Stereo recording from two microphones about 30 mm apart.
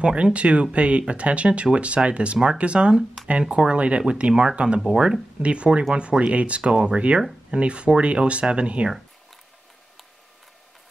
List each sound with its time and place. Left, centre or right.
0.0 s speech: right